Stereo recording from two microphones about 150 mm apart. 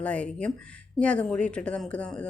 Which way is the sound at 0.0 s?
10° left (ahead or behind).